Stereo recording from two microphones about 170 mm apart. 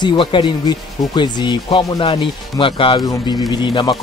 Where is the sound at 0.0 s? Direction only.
30° left (ahead or behind).